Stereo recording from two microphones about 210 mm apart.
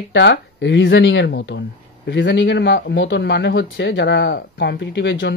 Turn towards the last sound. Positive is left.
turn(degrees=60)  # may be behind; listen again after turning